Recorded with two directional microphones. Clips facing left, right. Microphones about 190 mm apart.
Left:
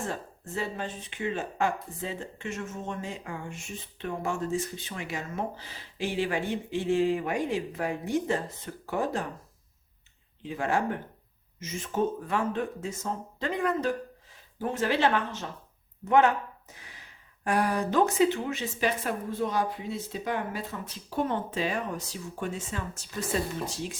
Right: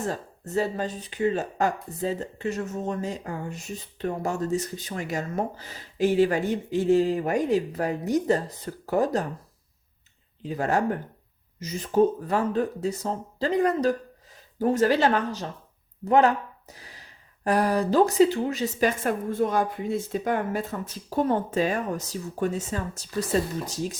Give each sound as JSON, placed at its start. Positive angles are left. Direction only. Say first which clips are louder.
{"t": 0.0, "sound": "speech", "louder": "right 4 dB", "side_deg": -40}
{"t": 10.4, "sound": "speech", "louder": "right 4 dB", "side_deg": -40}